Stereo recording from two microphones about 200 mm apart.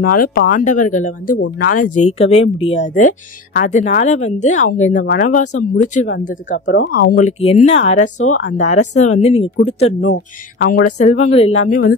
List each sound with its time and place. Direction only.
0.0 s speech: 45° left (ahead or behind)
2.0 s speech: 30° left (ahead or behind)
6.7 s speech: 50° left (ahead or behind)
7.2 s speech: 35° left (ahead or behind)
10.1 s speech: 50° left (ahead or behind); by 11.6 s 30° left (ahead or behind)
11.6 s speech: 90° left